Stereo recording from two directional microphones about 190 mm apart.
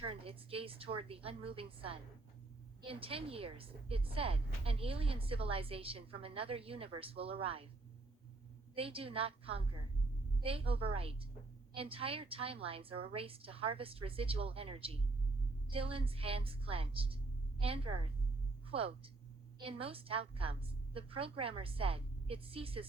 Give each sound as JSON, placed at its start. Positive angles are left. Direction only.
{"t": 0.1, "sound": "a woman's voice", "side_deg": -30}
{"t": 8.7, "sound": "a woman's voice", "side_deg": -30}